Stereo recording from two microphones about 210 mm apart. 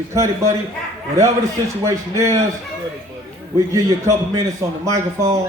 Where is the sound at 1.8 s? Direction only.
15° right (ahead or behind).